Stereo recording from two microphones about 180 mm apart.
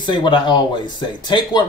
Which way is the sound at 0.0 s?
25° left (ahead or behind).